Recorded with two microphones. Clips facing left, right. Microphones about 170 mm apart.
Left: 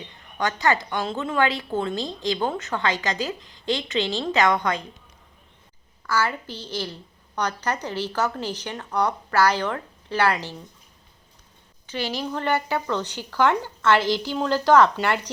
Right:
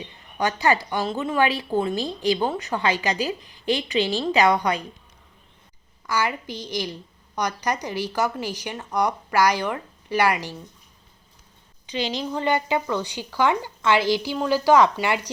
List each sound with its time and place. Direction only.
0.3 s speech: 15° right (ahead or behind)
6.1 s speech: 15° right (ahead or behind)
11.9 s speech: 20° right (ahead or behind)